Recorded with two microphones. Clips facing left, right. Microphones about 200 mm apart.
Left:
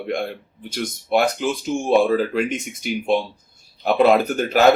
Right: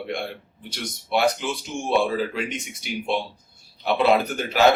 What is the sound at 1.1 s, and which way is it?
Speech, 45° left (ahead or behind).